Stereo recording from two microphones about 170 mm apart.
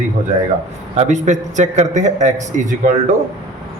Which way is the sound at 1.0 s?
45° right (ahead or behind).